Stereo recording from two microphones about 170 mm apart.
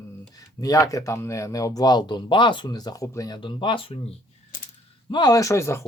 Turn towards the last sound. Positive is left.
turn(degrees=15)  # may be behind; listen again after turning